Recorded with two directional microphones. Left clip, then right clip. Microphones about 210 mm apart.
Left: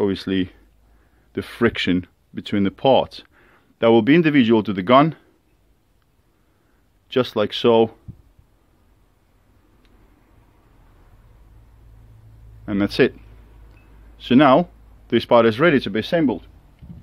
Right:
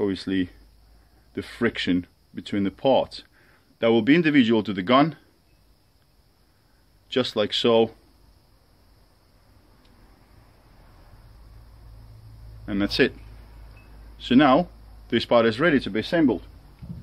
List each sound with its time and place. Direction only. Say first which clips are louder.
0.0 s speech: left 4 dB; 45° left (ahead or behind)
7.1 s speech: left 3 dB; 40° left (ahead or behind)
12.6 s speech: left 4 dB; 40° left (ahead or behind)
14.1 s speech: left 4 dB; 40° left (ahead or behind)